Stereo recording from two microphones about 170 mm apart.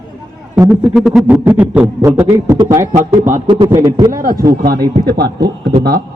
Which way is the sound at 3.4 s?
30° right (ahead or behind).